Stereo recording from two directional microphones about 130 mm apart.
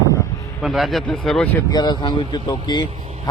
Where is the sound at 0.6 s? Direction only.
Centre (ahead or behind).